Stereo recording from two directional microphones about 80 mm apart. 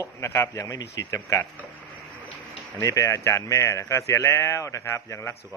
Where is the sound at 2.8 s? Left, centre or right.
Left.